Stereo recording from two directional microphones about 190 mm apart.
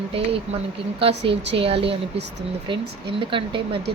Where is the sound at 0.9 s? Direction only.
30° right (ahead or behind).